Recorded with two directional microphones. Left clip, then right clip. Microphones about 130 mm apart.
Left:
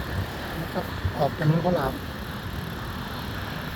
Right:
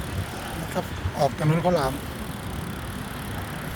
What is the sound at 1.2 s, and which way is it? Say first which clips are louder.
Speech: right 2 dB; 50° right (ahead or behind).